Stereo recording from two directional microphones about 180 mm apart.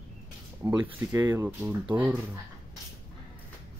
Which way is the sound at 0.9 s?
15° right (ahead or behind).